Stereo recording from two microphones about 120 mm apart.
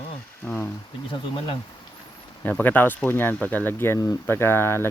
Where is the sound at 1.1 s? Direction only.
40° left (ahead or behind).